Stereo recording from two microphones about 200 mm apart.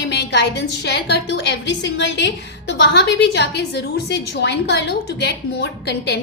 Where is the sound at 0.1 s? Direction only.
55° left (ahead or behind).